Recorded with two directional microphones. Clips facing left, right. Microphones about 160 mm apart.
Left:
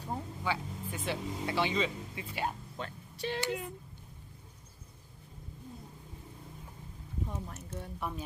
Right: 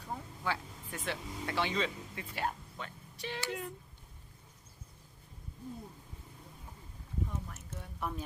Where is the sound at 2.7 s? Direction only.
35° left (ahead or behind).